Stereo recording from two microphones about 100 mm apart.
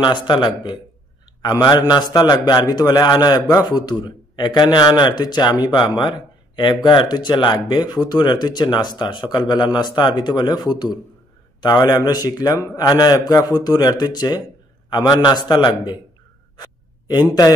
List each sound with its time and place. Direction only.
0.0 s a man's voice: 50° left (ahead or behind)
16.5 s gasp: 45° left (ahead or behind)